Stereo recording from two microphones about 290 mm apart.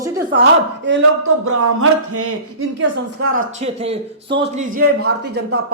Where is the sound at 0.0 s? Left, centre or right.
Centre.